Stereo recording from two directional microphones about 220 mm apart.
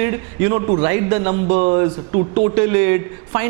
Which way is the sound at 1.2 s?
30° right (ahead or behind).